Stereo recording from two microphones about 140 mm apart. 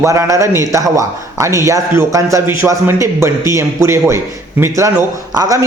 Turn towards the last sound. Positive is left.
turn(degrees=-25)  # may be behind; listen again after turning